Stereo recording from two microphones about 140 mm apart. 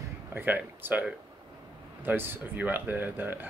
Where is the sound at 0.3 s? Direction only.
15° right (ahead or behind).